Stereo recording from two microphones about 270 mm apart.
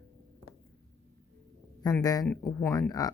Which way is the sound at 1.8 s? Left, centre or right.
Centre.